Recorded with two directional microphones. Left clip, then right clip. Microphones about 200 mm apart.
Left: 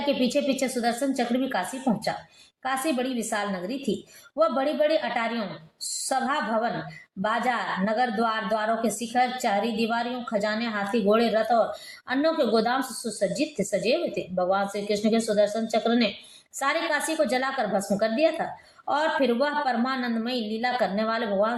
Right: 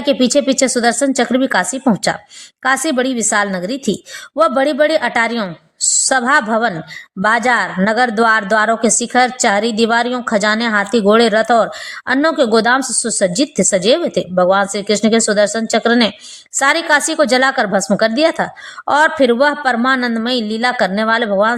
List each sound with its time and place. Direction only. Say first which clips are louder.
0.2 s a woman's voice: right 12 dB; 40° right (ahead or behind)
2.6 s a woman's voice: right 12 dB; 40° right (ahead or behind)